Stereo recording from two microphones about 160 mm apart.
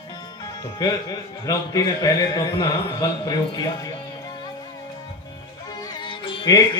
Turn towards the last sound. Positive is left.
turn(degrees=25)  # may be behind; listen again after turning